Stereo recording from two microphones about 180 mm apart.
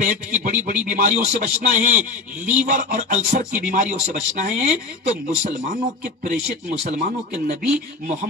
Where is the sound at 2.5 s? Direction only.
45° right (ahead or behind).